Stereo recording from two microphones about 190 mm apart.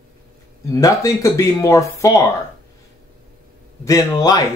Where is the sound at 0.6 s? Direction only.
15° left (ahead or behind).